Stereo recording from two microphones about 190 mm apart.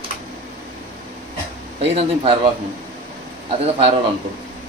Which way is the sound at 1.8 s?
30° right (ahead or behind).